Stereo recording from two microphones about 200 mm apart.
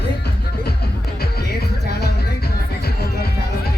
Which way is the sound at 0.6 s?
50° left (ahead or behind).